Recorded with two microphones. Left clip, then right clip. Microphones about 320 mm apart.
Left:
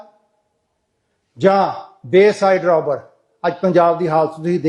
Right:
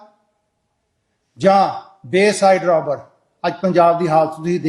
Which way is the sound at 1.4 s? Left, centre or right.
Centre.